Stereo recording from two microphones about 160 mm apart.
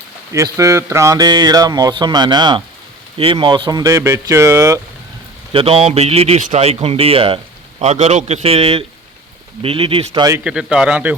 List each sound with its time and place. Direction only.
0.3 s speech: 20° right (ahead or behind)
5.5 s a man's voice: 35° right (ahead or behind)
10.4 s speech: 5° right (ahead or behind)